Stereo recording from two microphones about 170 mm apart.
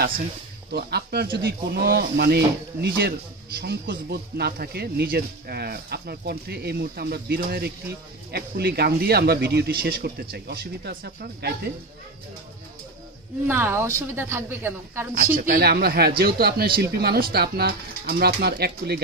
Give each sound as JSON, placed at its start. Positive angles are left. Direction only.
{"t": 0.7, "sound": "speech", "side_deg": -70}
{"t": 13.5, "sound": "a woman's voice", "side_deg": -15}
{"t": 15.1, "sound": "speech", "side_deg": -60}